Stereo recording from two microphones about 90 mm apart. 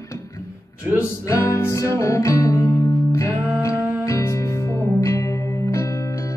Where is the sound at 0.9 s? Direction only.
15° right (ahead or behind).